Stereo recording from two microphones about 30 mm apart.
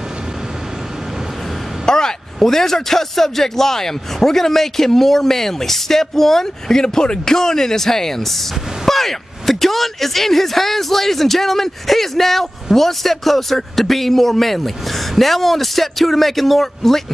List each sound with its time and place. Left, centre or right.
1.9 s a sound: left
2.3 s a man's voice: centre
6.8 s a man's voice: left